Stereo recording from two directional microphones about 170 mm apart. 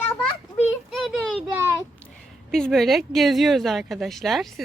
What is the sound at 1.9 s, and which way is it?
Speech, 5° left (ahead or behind).